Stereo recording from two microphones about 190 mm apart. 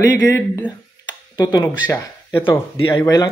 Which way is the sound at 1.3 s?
20° left (ahead or behind).